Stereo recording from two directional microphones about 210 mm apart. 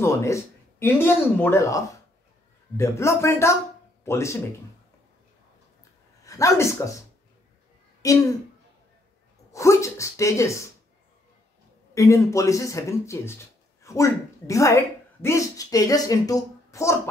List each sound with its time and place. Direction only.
0.0 s speech: 15° left (ahead or behind)
6.2 s speech: 15° left (ahead or behind)
8.0 s speech: 15° left (ahead or behind)
9.5 s speech: 15° left (ahead or behind)
11.9 s speech: 15° left (ahead or behind)